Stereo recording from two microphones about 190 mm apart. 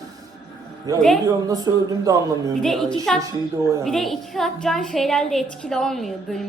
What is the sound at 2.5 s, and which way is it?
A woman's voice, centre (ahead or behind).